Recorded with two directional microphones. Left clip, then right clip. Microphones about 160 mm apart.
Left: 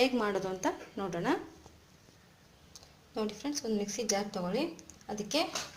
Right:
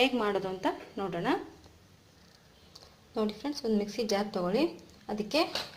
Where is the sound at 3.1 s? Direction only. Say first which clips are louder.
Right 3 dB; 15° right (ahead or behind).